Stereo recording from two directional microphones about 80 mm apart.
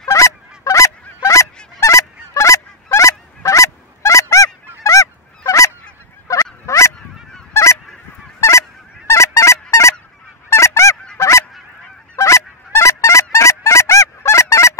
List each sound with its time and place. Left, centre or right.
0.1 s honk: left
6.2 s fowl: left
7.5 s goose: left
8.4 s honk: left
10.5 s goose: left
12.2 s honk: left